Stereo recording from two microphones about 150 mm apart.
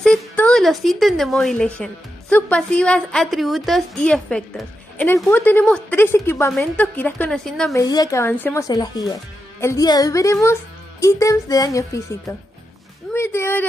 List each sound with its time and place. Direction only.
0.0 s speech: 5° left (ahead or behind)
6.5 s a woman's voice: 5° left (ahead or behind)
7.7 s a woman's voice: 25° left (ahead or behind)